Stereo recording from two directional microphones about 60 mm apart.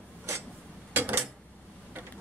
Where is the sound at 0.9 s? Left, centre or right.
Right.